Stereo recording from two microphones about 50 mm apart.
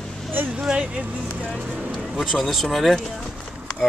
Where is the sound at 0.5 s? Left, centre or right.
Centre.